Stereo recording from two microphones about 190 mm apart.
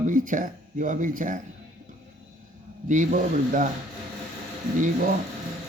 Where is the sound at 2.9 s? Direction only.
40° right (ahead or behind).